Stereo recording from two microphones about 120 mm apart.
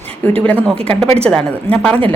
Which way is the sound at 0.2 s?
15° left (ahead or behind).